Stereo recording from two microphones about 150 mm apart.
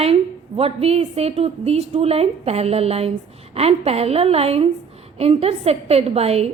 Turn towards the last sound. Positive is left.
turn(degrees=-45)  # may be behind; listen again after turning